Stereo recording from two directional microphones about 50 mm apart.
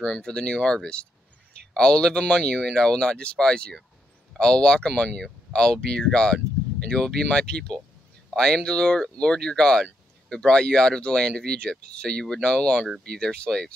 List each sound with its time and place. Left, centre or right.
0.0 s speech: centre